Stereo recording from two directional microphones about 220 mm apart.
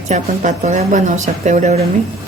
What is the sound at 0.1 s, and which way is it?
Speech, 35° right (ahead or behind).